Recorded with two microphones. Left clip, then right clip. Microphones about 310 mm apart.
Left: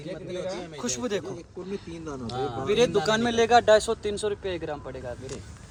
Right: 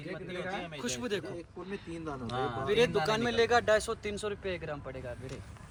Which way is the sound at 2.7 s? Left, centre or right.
Left.